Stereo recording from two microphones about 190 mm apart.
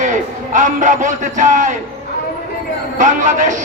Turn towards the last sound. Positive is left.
turn(degrees=-40)  # may be behind; listen again after turning